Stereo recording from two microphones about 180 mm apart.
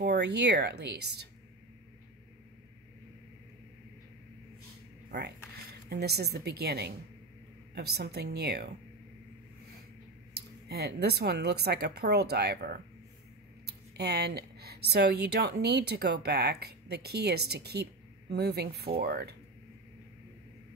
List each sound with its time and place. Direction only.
0.0 s speech: 65° right (ahead or behind)
5.1 s speech: 70° right (ahead or behind)
10.3 s speech: 60° right (ahead or behind)